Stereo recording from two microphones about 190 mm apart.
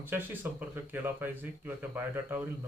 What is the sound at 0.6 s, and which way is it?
Speech, 10° right (ahead or behind).